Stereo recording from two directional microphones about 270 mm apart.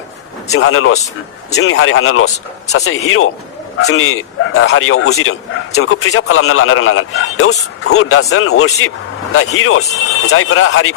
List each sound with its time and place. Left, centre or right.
0.5 s a man's voice: left